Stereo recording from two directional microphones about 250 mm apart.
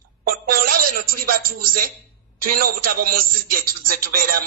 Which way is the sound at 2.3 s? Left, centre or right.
Right.